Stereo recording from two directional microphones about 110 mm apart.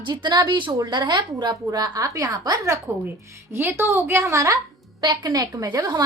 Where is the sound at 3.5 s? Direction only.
20° right (ahead or behind).